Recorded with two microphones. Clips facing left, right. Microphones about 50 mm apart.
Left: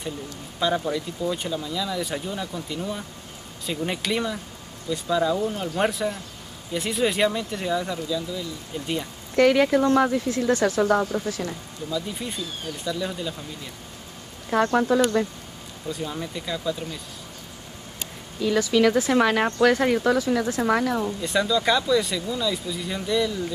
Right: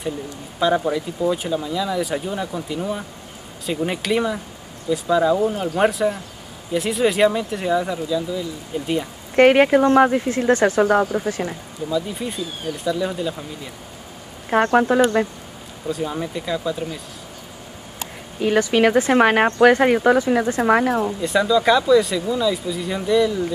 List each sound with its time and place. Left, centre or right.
0.6 s speech: centre
9.3 s speech: right
11.4 s speech: centre
14.5 s speech: right
16.0 s speech: centre
18.4 s speech: right
20.9 s speech: centre